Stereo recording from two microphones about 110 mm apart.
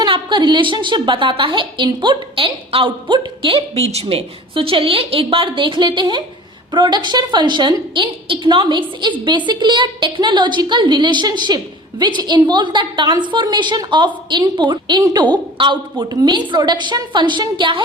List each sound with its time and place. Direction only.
0.0 s a woman's voice: 45° right (ahead or behind)